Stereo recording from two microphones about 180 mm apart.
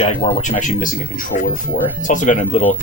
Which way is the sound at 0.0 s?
40° left (ahead or behind).